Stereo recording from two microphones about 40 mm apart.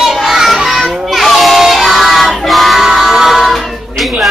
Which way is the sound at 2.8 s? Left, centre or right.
Centre.